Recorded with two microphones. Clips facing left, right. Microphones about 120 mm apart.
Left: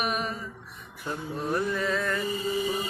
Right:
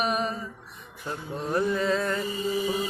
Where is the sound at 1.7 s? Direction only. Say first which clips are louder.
Right 3 dB; 25° right (ahead or behind).